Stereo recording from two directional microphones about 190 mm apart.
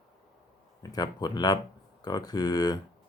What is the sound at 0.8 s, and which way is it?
Speech, 20° left (ahead or behind).